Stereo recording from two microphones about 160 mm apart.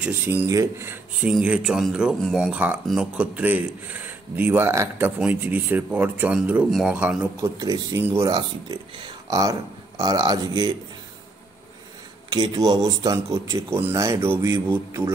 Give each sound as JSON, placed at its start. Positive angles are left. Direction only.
{"t": 0.0, "sound": "a man's voice", "side_deg": -10}
{"t": 7.5, "sound": "speech", "side_deg": -20}
{"t": 8.4, "sound": "speech", "side_deg": -30}
{"t": 12.3, "sound": "speech", "side_deg": -25}